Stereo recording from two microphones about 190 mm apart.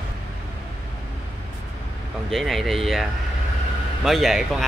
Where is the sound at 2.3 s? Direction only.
Centre (ahead or behind).